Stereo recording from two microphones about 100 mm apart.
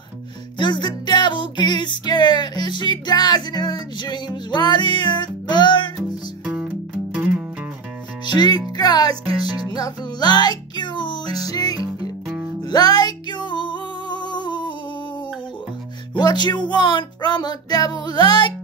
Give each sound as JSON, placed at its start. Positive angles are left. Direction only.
{"t": 0.6, "sound": "music", "side_deg": 50}
{"t": 6.4, "sound": "music", "side_deg": -5}
{"t": 8.4, "sound": "music", "side_deg": 45}
{"t": 11.3, "sound": "music", "side_deg": 40}
{"t": 16.2, "sound": "music", "side_deg": 45}